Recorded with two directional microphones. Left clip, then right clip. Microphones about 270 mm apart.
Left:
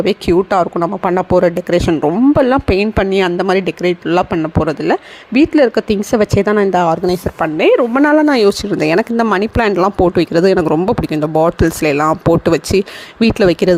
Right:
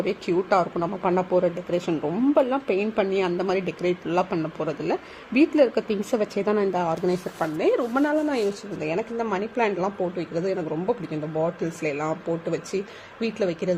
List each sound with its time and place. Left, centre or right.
0.0 s speech: left